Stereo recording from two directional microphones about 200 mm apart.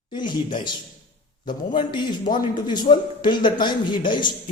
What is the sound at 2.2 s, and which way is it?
Speech, 40° left (ahead or behind).